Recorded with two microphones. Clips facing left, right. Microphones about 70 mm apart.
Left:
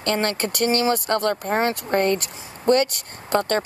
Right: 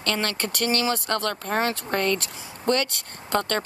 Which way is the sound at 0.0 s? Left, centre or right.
Left.